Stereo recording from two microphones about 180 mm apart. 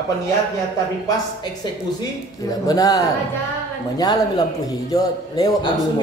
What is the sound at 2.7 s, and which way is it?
Speech, 20° left (ahead or behind).